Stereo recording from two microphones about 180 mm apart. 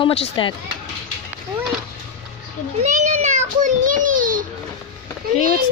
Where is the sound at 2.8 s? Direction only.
40° right (ahead or behind).